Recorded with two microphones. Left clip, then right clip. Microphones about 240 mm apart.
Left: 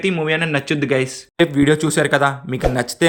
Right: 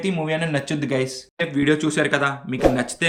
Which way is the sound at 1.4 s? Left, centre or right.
Left.